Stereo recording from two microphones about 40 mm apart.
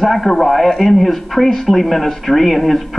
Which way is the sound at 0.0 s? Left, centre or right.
Centre.